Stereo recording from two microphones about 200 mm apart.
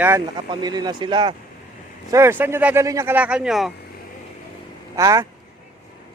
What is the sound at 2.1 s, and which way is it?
Speech, 10° right (ahead or behind).